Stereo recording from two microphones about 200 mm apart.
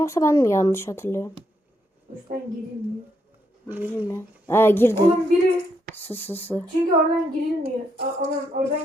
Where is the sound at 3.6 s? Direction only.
10° right (ahead or behind).